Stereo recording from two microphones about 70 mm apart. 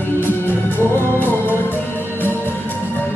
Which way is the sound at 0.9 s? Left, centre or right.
Left.